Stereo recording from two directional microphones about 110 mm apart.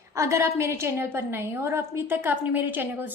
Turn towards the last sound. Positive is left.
turn(degrees=-15)  # may be behind; listen again after turning